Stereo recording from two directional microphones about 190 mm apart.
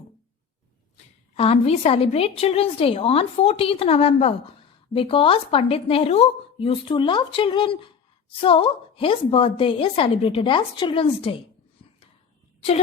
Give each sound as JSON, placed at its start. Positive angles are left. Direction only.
{"t": 1.4, "sound": "a woman's voice", "side_deg": 30}